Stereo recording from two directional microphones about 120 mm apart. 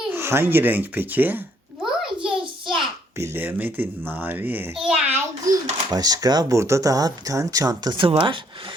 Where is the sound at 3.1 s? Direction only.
20° right (ahead or behind).